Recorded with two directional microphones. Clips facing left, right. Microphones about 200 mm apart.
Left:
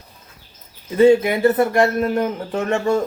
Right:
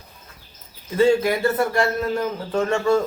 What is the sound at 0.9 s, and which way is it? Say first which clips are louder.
Speech: left 4 dB; 20° left (ahead or behind).